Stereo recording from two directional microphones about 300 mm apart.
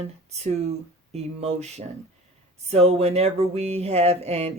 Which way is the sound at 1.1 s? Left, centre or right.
Right.